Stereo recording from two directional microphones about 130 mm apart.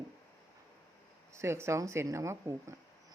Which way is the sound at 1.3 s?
20° right (ahead or behind).